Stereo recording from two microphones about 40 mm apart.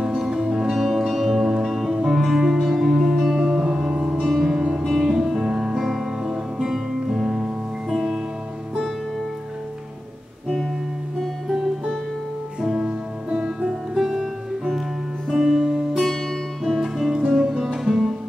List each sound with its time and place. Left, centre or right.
0.2 s music: centre
4.3 s music: centre
12.7 s music: right
13.9 s music: centre
15.9 s music: centre
16.8 s music: centre